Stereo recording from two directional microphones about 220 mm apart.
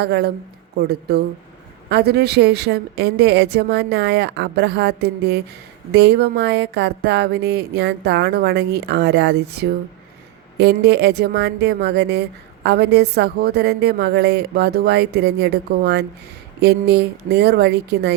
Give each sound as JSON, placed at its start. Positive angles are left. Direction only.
{"t": 0.0, "sound": "a woman's voice", "side_deg": -50}